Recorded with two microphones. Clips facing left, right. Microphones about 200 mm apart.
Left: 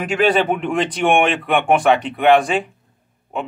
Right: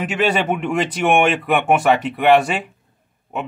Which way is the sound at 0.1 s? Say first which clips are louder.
Left 4 dB; 5° right (ahead or behind).